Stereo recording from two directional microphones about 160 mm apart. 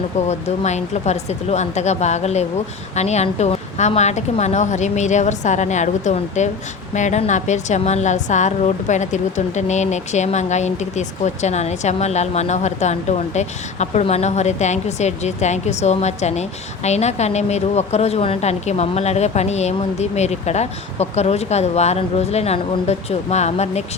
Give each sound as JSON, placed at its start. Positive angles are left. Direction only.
{"t": 0.3, "sound": "a woman's voice", "side_deg": 45}